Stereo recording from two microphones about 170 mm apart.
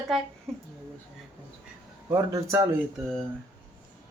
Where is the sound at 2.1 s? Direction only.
15° right (ahead or behind).